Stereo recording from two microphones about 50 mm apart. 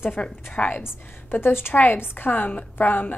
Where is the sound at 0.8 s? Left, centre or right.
Left.